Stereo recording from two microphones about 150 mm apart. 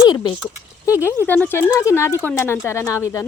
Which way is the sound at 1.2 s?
10° left (ahead or behind).